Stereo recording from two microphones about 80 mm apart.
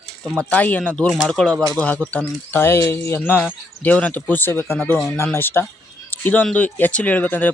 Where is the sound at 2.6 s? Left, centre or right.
Left.